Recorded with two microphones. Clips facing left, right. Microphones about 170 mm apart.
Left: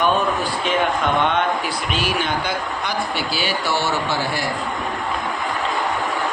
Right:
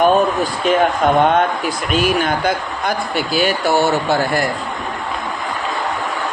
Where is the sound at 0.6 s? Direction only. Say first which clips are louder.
Right 7 dB; 45° right (ahead or behind).